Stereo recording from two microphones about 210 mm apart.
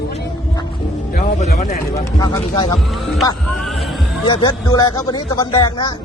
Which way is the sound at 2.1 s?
15° left (ahead or behind).